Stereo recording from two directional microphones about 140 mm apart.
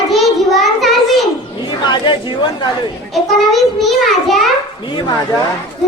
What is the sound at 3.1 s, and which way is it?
A child's voice, centre (ahead or behind).